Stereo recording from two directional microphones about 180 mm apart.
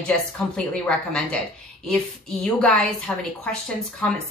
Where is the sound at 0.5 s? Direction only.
5° left (ahead or behind).